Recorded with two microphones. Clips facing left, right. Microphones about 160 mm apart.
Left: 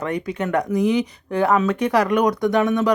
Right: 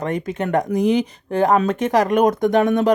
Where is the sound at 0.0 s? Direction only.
40° right (ahead or behind).